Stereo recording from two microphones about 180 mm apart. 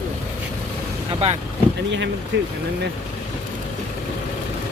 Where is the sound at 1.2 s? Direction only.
35° right (ahead or behind).